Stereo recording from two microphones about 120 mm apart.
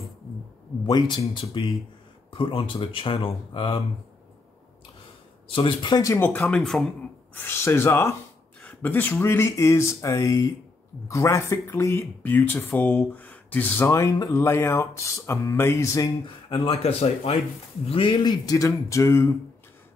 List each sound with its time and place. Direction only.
0.8 s speech: 35° left (ahead or behind)
5.5 s speech: 45° left (ahead or behind)
6.1 s speech: 20° left (ahead or behind)
7.3 s speech: 20° left (ahead or behind)
8.6 s a sound: 15° left (ahead or behind)
9.2 s speech: 20° left (ahead or behind)
16.4 s speech: 50° left (ahead or behind)
17.8 s speech: 50° left (ahead or behind)
18.4 s speech: 30° left (ahead or behind)